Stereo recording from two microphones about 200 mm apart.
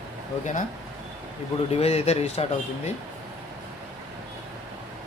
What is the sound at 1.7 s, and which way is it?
Speech, 30° left (ahead or behind).